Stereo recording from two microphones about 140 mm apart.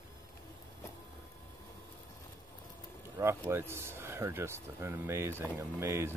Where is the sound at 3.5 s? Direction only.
15° right (ahead or behind).